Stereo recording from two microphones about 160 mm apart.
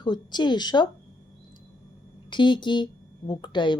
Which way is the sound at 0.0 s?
25° left (ahead or behind).